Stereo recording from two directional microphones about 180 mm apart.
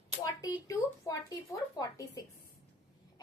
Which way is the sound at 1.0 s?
20° left (ahead or behind).